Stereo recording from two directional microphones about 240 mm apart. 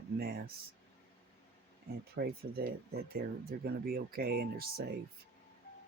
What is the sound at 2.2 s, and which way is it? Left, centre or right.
Speech, right.